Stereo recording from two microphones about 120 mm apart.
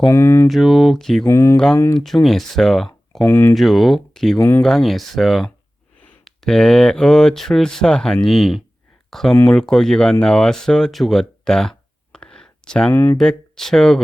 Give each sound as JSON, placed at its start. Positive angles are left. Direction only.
{"t": 0.1, "sound": "speech", "side_deg": 20}
{"t": 0.4, "sound": "speech", "side_deg": 0}
{"t": 1.3, "sound": "speech", "side_deg": 25}
{"t": 1.5, "sound": "speech", "side_deg": 5}
{"t": 3.2, "sound": "speech", "side_deg": 20}
{"t": 3.5, "sound": "speech", "side_deg": 0}
{"t": 4.4, "sound": "speech", "side_deg": 20}
{"t": 4.6, "sound": "speech", "side_deg": 0}
{"t": 9.0, "sound": "a sound", "side_deg": 5}
{"t": 9.4, "sound": "speech", "side_deg": 5}
{"t": 12.9, "sound": "speech", "side_deg": 20}
{"t": 13.1, "sound": "speech", "side_deg": 5}